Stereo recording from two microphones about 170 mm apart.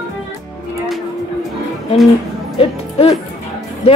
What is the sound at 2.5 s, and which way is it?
Music, 35° left (ahead or behind).